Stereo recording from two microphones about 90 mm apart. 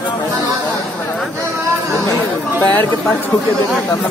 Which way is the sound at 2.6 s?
20° left (ahead or behind).